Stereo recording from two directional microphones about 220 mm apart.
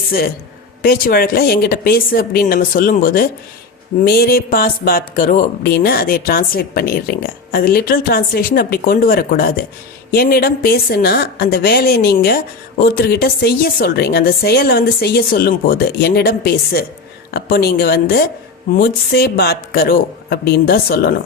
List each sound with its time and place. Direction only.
0.8 s a woman's voice: 40° left (ahead or behind)